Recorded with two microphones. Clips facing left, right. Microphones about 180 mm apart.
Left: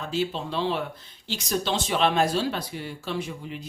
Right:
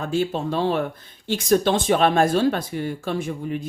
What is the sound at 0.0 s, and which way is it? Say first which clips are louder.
Speech: right 5 dB; 50° right (ahead or behind).